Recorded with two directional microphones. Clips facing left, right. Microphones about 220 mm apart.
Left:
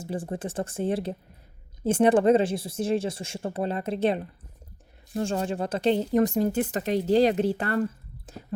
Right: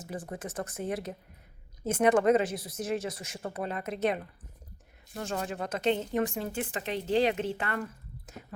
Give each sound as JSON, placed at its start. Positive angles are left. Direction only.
{"t": 0.0, "sound": "a woman's voice", "side_deg": 30}